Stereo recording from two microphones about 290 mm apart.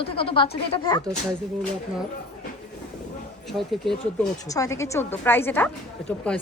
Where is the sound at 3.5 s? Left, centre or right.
Centre.